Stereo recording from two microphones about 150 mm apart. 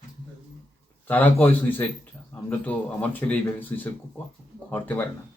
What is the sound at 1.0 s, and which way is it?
Speech, 10° left (ahead or behind).